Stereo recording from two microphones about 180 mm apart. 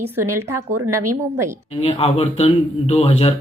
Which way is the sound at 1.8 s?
35° left (ahead or behind).